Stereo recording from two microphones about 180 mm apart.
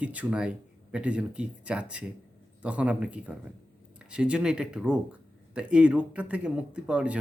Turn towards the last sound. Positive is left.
turn(degrees=-5)  # may be behind; listen again after turning